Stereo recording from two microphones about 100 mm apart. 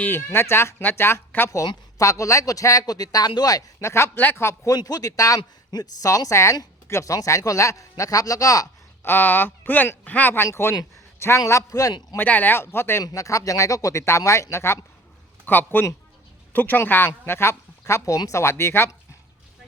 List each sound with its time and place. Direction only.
0.0 s speech: 25° left (ahead or behind)
1.5 s speech: 35° left (ahead or behind)
3.8 s speech: 25° left (ahead or behind)
4.7 s speech: 40° left (ahead or behind)
9.0 s speech: 20° left (ahead or behind); by 12.0 s 35° left (ahead or behind)
12.1 s speech: 15° left (ahead or behind)